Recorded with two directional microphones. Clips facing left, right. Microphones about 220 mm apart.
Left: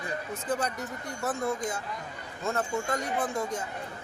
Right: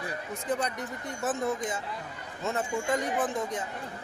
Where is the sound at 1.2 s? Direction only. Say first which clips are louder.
Right 1 dB; centre (ahead or behind).